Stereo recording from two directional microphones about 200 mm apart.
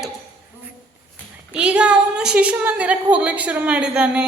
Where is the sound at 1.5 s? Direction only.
5° right (ahead or behind).